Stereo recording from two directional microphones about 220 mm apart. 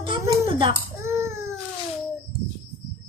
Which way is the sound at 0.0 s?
20° right (ahead or behind).